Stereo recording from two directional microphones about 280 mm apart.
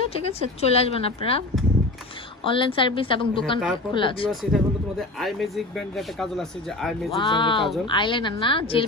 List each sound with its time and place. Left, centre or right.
0.3 s a woman's voice: left
2.4 s a woman's voice: centre
4.3 s speech: centre
7.1 s a woman's voice: centre